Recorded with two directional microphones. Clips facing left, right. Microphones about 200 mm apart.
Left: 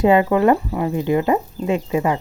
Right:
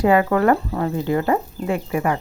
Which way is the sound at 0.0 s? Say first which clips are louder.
Left 2 dB; 20° left (ahead or behind).